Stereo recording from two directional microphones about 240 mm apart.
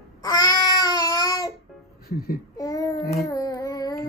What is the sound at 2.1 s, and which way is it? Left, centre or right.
Speech, left.